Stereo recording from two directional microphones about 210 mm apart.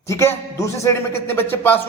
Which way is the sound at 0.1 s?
15° left (ahead or behind).